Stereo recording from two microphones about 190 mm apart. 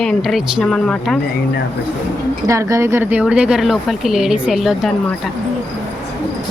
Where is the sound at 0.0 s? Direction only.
Centre (ahead or behind).